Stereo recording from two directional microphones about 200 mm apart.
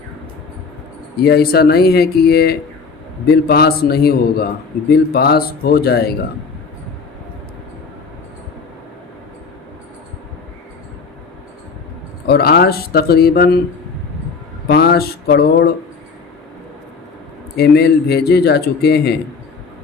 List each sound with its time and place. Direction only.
1.2 s a man's voice: 50° left (ahead or behind)
12.3 s a man's voice: 50° left (ahead or behind)
14.7 s a man's voice: 50° left (ahead or behind)
17.6 s a man's voice: 55° left (ahead or behind)